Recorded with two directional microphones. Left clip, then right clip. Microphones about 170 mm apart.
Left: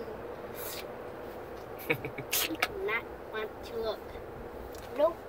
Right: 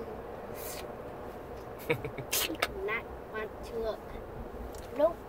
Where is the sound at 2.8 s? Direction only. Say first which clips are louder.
Left 2 dB; centre (ahead or behind).